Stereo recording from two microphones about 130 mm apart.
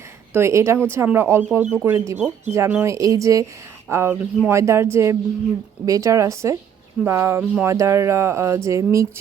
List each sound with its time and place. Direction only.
0.3 s speech: 20° right (ahead or behind)